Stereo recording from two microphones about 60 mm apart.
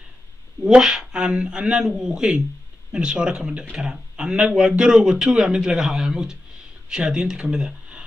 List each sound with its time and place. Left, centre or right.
0.7 s speech: centre